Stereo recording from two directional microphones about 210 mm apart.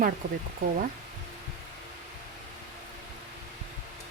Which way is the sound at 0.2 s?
40° right (ahead or behind).